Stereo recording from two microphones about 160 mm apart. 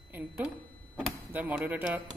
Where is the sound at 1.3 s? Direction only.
10° right (ahead or behind).